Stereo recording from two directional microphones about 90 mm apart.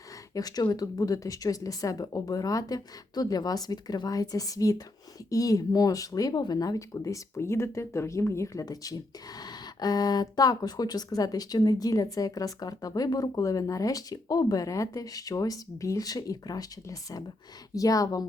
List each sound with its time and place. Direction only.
0.3 s speech: 45° left (ahead or behind); by 8.6 s 30° left (ahead or behind)
8.6 s speech: 40° left (ahead or behind)